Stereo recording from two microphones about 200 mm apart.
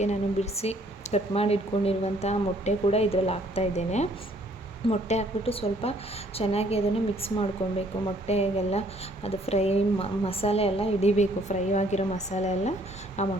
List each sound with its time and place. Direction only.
0.0 s a woman's voice: 35° left (ahead or behind)